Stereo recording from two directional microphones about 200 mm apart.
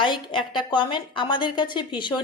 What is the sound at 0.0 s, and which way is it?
A woman's voice, 25° left (ahead or behind).